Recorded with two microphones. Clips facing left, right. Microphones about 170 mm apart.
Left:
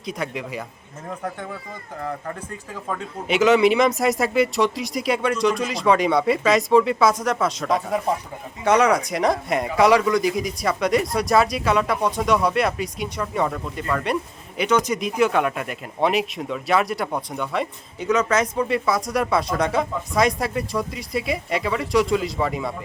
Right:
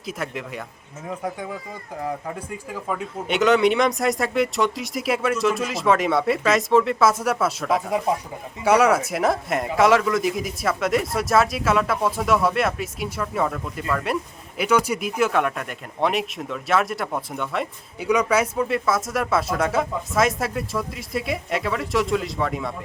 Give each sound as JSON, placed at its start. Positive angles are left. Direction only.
{"t": 0.0, "sound": "speech", "side_deg": -5}